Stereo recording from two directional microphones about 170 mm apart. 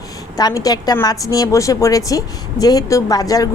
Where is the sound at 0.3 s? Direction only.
20° left (ahead or behind).